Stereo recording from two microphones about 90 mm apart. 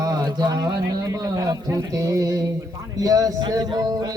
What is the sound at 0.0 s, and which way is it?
A man's voice, 45° right (ahead or behind).